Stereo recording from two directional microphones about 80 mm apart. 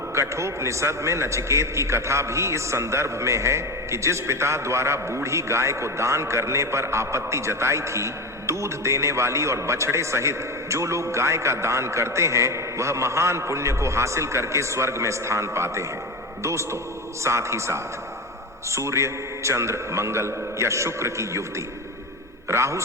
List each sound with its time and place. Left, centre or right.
0.1 s a man's voice: right
22.4 s a man's voice: right